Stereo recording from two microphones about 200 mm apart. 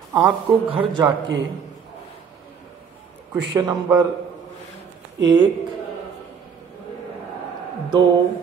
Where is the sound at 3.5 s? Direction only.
15° right (ahead or behind).